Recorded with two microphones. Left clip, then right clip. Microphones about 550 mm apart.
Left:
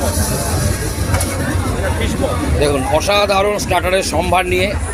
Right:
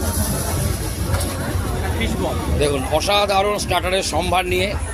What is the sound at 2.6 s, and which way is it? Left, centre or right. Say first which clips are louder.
Speech: left 4 dB; right.